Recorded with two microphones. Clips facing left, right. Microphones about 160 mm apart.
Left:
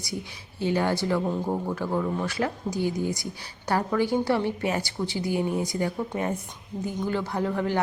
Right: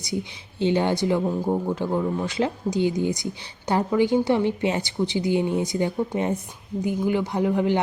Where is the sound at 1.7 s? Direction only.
20° right (ahead or behind).